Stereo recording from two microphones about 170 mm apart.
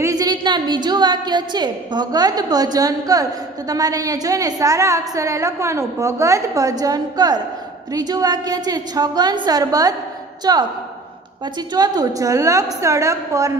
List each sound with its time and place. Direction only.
0.0 s a woman's voice: 20° right (ahead or behind)
11.7 s a woman's voice: 25° right (ahead or behind)